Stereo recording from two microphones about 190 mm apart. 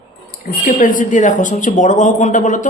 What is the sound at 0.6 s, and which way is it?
A woman's voice, 45° left (ahead or behind).